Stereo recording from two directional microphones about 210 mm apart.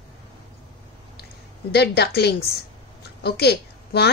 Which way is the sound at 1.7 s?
50° left (ahead or behind).